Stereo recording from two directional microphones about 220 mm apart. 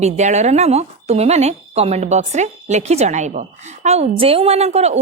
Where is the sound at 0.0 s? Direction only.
30° right (ahead or behind).